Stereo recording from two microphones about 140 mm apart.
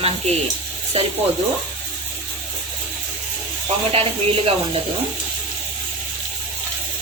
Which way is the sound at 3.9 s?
40° right (ahead or behind).